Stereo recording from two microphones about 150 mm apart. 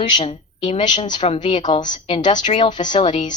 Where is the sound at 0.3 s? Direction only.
35° left (ahead or behind).